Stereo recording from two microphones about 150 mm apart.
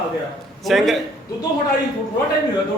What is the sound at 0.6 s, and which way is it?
Speech, centre (ahead or behind).